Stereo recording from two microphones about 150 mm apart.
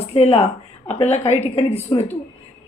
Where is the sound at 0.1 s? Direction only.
40° left (ahead or behind).